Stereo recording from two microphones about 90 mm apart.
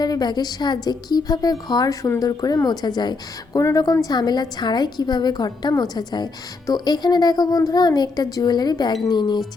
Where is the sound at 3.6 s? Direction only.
40° left (ahead or behind).